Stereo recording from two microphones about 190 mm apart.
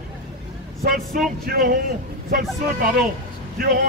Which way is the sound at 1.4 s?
50° right (ahead or behind).